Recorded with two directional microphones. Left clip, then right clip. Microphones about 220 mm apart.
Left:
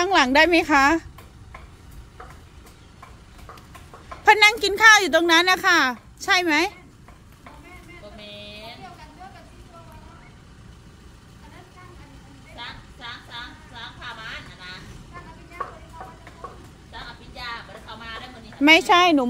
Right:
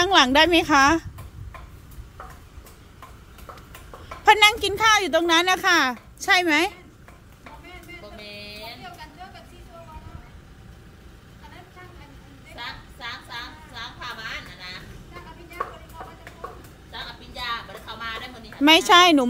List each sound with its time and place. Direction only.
0.0 s speech: centre (ahead or behind)
4.2 s speech: 5° left (ahead or behind)
8.2 s music: 45° right (ahead or behind)
12.5 s a sound: 45° right (ahead or behind)
16.0 s vehicle: 40° right (ahead or behind)
18.6 s speech: centre (ahead or behind)